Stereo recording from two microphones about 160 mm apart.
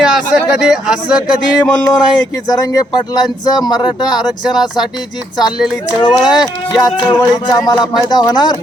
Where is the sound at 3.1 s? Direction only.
25° left (ahead or behind).